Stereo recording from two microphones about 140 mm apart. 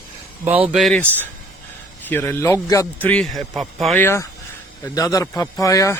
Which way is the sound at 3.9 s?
15° left (ahead or behind).